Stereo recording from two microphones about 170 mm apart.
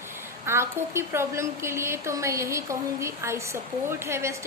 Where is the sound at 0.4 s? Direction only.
15° right (ahead or behind).